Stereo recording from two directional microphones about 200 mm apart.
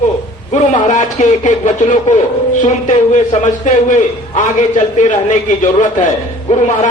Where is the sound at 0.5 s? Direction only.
35° left (ahead or behind).